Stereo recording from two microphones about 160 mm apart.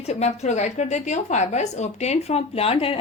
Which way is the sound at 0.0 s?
40° left (ahead or behind).